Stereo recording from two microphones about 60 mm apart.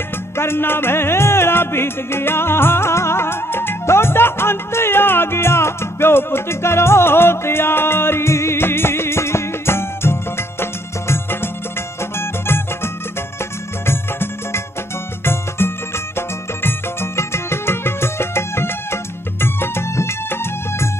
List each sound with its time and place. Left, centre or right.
0.4 s music: left